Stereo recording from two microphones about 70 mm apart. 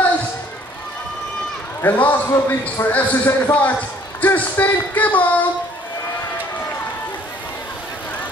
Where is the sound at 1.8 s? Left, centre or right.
Left.